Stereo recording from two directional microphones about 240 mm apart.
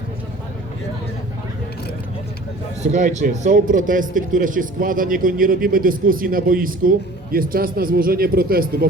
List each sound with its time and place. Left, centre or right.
2.8 s speech: right